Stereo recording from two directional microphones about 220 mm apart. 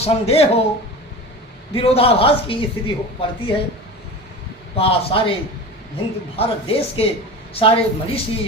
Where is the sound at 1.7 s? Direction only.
25° left (ahead or behind).